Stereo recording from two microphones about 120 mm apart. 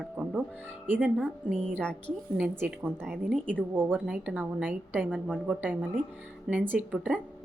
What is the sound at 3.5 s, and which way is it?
A woman's voice, 15° right (ahead or behind).